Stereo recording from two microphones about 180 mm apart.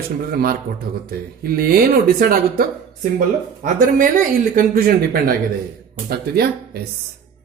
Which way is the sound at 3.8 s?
50° right (ahead or behind).